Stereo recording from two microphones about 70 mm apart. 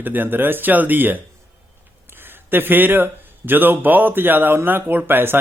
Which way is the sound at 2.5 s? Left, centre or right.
Right.